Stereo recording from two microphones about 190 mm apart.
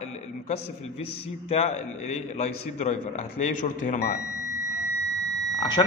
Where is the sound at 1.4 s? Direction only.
35° left (ahead or behind).